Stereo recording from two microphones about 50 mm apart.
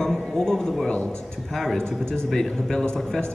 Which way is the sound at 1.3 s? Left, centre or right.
Centre.